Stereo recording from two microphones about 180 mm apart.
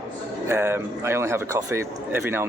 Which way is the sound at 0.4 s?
15° right (ahead or behind).